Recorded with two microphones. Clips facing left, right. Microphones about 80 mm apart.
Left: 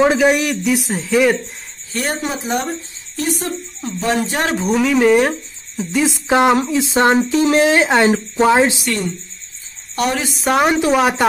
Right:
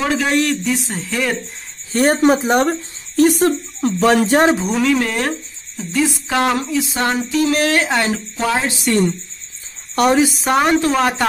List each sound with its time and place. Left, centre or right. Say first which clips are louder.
0.0 s speech: left 6 dB; centre
0.3 s speech: left 1 dB; centre
1.9 s speech: right 9 dB; right
4.6 s speech: left 2 dB; centre; by 8.7 s left
10.2 s speech: even; centre